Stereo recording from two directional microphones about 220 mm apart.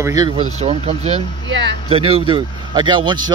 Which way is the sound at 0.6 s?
30° right (ahead or behind).